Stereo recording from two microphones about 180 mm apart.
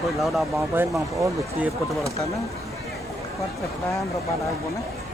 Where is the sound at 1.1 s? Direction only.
15° right (ahead or behind).